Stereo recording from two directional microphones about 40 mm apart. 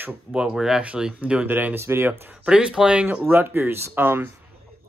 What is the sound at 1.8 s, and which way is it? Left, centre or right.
Speech, right.